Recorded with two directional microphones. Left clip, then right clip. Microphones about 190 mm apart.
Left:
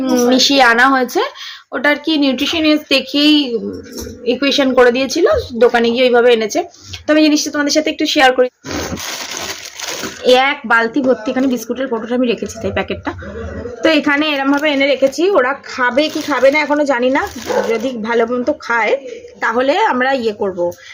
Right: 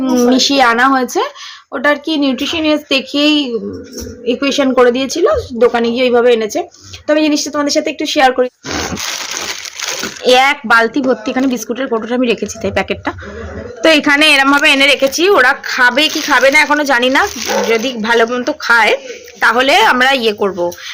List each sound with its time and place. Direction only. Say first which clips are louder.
0.0 s a woman's voice: right 1 dB; 5° right (ahead or behind)
8.7 s roaring cats: right 3 dB; 25° right (ahead or behind)
10.2 s a woman's voice: right 2 dB; 30° right (ahead or behind)